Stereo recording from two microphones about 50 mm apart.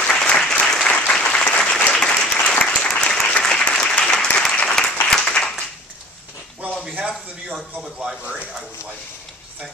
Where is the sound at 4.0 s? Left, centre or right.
Centre.